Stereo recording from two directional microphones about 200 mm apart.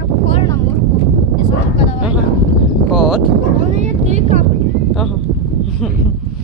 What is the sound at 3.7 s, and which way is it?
Vehicle, 35° right (ahead or behind).